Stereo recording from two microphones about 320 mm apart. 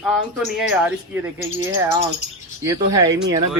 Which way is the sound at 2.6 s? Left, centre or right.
Centre.